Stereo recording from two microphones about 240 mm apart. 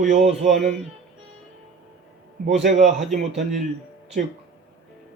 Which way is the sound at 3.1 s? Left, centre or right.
Right.